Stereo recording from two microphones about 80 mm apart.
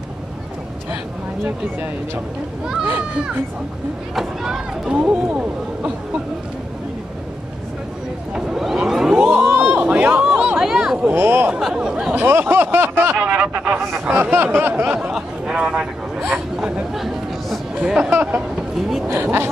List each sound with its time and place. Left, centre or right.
2.6 s speech: centre
4.1 s speech: centre
8.4 s vehicle: centre
9.4 s a sound: right
9.8 s chatter: centre
10.6 s chatter: centre
11.1 s speech: right
11.5 s speech: centre
12.1 s speech: right
13.2 s speech: centre
14.1 s speech: right
15.0 s speech: centre
16.2 s chatter: centre
18.1 s speech: centre